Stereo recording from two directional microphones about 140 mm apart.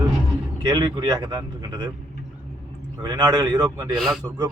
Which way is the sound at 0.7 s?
25° right (ahead or behind).